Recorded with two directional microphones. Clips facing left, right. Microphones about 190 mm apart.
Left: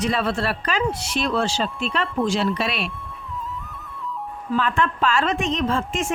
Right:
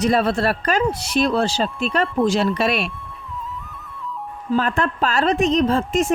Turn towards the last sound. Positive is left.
turn(degrees=-35)  # may be behind; listen again after turning